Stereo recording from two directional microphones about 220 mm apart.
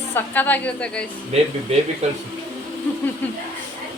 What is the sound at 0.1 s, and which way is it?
Speech, 10° left (ahead or behind).